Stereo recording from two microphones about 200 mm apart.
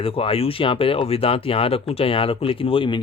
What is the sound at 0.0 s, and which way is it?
Speech, 30° left (ahead or behind).